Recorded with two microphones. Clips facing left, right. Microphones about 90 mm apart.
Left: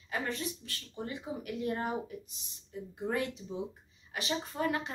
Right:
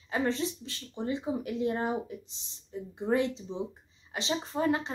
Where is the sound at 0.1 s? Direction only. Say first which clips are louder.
Right 6 dB; 25° right (ahead or behind).